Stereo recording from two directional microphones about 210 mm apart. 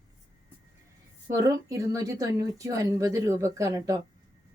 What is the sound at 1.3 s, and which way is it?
A woman's voice, 15° right (ahead or behind).